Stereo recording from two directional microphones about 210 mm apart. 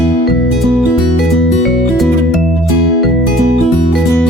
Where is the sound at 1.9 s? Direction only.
Centre (ahead or behind).